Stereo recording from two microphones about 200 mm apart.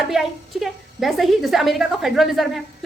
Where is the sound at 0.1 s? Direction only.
Centre (ahead or behind).